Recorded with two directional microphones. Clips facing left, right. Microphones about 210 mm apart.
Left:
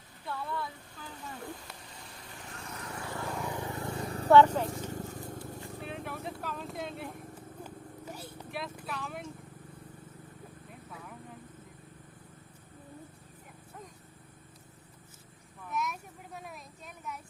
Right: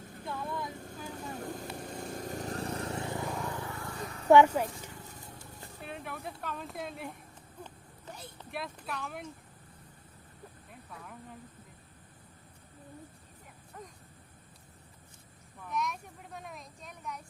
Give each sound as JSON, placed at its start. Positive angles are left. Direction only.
{"t": 0.3, "sound": "vehicle", "side_deg": -15}
{"t": 0.7, "sound": "vehicle", "side_deg": -45}
{"t": 3.5, "sound": "vehicle", "side_deg": 20}
{"t": 4.3, "sound": "speech", "side_deg": -10}
{"t": 4.8, "sound": "vehicle", "side_deg": 40}
{"t": 5.8, "sound": "vehicle", "side_deg": 0}
{"t": 8.4, "sound": "speech", "side_deg": 0}
{"t": 10.7, "sound": "vehicle", "side_deg": 0}
{"t": 15.6, "sound": "a sound", "side_deg": 5}